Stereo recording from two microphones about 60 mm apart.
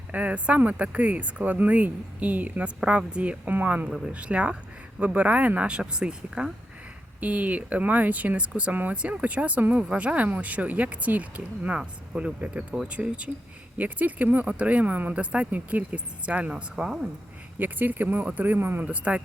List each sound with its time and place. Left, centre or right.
0.1 s speech: right
3.8 s speech: centre
7.2 s speech: right
17.6 s speech: right
18.8 s speech: right